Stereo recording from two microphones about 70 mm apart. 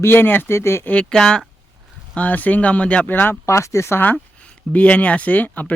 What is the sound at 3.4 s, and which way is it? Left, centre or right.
Speech, left.